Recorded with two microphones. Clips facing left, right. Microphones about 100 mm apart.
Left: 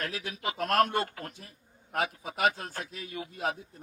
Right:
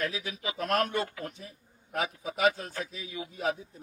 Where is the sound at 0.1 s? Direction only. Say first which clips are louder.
Left 1 dB; 50° left (ahead or behind).